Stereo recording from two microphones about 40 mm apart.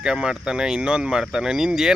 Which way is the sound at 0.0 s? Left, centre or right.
Right.